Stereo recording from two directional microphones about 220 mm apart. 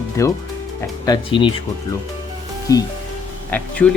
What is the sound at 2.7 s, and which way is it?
Speech, 15° left (ahead or behind).